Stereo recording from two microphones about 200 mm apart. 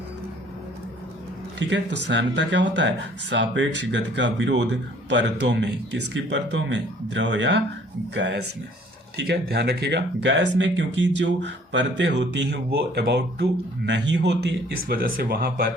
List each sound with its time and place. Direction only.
1.5 s speech: 60° right (ahead or behind)
14.8 s speech: 50° right (ahead or behind)